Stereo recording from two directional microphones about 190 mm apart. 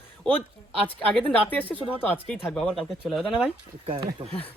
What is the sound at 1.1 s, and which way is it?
Speech, 5° left (ahead or behind).